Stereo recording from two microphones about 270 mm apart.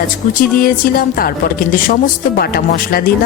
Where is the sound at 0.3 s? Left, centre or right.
Left.